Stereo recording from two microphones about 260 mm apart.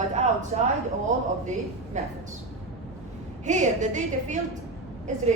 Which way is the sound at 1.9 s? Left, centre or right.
Right.